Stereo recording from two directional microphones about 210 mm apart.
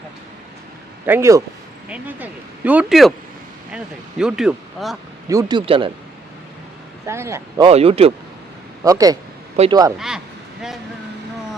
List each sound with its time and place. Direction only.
1.0 s speech: 10° right (ahead or behind)
5.3 s speech: 20° right (ahead or behind)
7.0 s speech: 15° right (ahead or behind)
7.7 s speech: 30° right (ahead or behind)
8.8 s speech: 15° right (ahead or behind)